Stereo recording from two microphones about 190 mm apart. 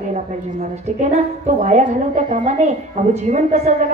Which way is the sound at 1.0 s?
40° right (ahead or behind).